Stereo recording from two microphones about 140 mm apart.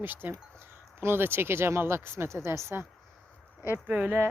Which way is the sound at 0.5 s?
15° right (ahead or behind).